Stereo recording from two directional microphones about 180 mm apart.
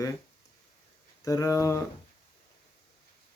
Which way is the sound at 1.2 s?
20° left (ahead or behind).